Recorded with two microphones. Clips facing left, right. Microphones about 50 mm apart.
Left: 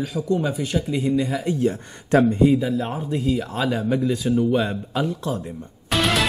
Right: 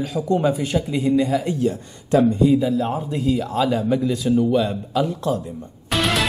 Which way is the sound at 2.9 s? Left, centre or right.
Centre.